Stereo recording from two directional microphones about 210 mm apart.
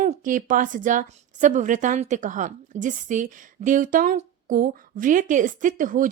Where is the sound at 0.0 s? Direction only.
35° right (ahead or behind).